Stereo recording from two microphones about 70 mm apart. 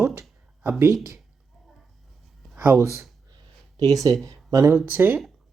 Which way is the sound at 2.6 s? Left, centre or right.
Right.